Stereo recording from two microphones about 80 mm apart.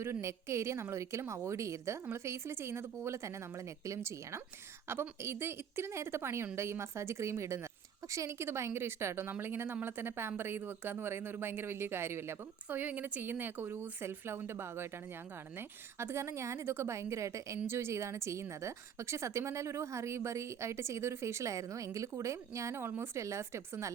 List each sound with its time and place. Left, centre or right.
0.0 s a woman's voice: right